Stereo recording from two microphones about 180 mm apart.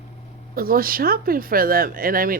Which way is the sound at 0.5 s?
55° right (ahead or behind).